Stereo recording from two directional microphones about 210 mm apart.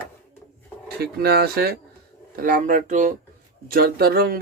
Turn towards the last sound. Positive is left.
turn(degrees=-45)  # may be behind; listen again after turning